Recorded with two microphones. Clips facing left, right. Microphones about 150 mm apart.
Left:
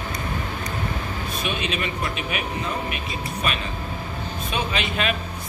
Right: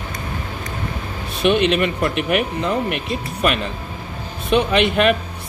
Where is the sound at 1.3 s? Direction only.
65° right (ahead or behind).